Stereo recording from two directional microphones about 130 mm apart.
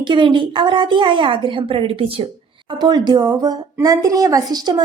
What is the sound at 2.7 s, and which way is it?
A woman's voice, 30° right (ahead or behind).